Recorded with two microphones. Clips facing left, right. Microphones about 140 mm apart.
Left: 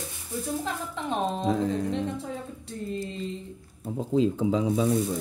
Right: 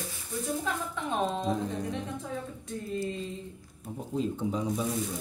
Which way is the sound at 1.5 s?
90° left.